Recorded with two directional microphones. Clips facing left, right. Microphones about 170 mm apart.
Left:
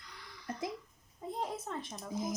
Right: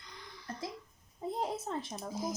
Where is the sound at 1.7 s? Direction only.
30° right (ahead or behind).